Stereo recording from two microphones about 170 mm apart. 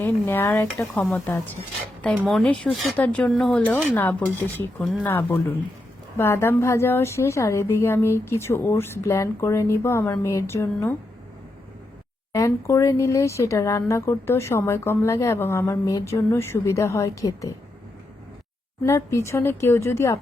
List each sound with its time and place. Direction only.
0.0 s speech: 15° left (ahead or behind)
0.8 s speech: centre (ahead or behind)
5.0 s speech: 10° left (ahead or behind)
12.3 s speech: 15° left (ahead or behind)
18.8 s speech: 15° left (ahead or behind)